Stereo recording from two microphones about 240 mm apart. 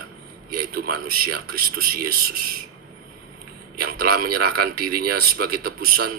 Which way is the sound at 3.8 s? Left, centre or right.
Right.